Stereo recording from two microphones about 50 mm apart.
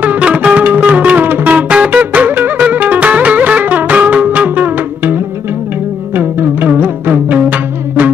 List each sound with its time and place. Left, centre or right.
0.0 s music: right